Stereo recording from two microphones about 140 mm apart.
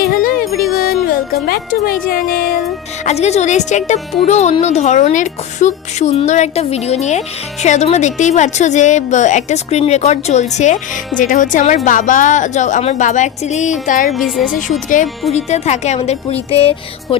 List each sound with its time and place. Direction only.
0.0 s music: 90° left
3.0 s a woman's voice: 50° left (ahead or behind); by 14.1 s 70° left (ahead or behind)
14.1 s speech: centre (ahead or behind)
15.3 s speech: 50° left (ahead or behind)